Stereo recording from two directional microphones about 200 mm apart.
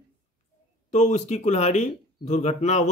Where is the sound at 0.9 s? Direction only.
35° left (ahead or behind).